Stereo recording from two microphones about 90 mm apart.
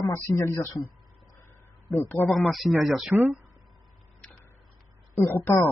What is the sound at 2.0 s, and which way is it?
Speech, 25° left (ahead or behind).